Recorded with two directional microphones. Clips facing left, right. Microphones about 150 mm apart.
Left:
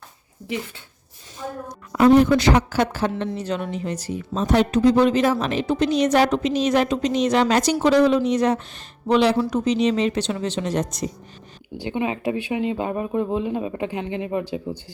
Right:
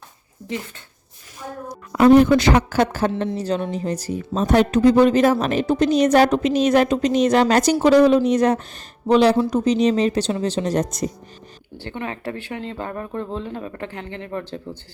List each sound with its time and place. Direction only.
2.0 s speech: 60° right (ahead or behind)
3.2 s a woman's voice: 35° right (ahead or behind)
11.8 s speech: 15° left (ahead or behind)